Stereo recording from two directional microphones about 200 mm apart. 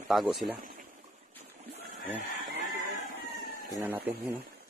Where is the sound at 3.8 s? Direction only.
10° right (ahead or behind).